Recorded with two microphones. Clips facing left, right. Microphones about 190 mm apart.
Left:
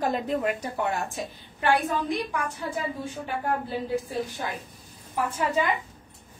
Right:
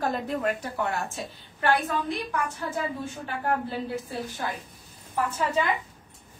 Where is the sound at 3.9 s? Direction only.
15° left (ahead or behind).